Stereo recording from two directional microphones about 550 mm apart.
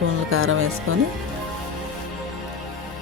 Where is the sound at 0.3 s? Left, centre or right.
Right.